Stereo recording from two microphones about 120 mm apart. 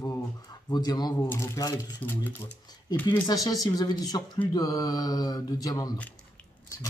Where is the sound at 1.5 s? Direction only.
30° left (ahead or behind).